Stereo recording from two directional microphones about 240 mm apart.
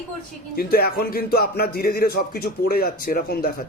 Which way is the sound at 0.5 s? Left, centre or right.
Left.